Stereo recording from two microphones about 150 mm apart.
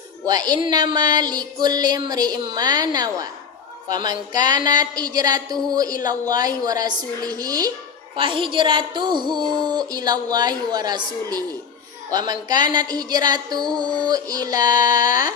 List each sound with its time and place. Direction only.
0.5 s a woman's voice: 25° right (ahead or behind)